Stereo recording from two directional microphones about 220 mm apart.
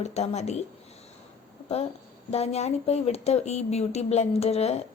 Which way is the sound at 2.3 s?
30° left (ahead or behind).